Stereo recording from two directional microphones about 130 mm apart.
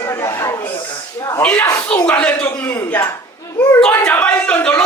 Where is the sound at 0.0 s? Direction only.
20° left (ahead or behind).